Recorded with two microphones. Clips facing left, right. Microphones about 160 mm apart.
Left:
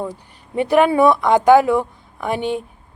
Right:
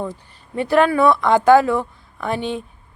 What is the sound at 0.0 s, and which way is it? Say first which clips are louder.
A woman's voice: even; 15° left (ahead or behind).